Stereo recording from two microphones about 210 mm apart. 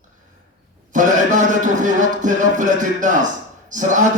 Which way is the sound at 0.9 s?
40° right (ahead or behind).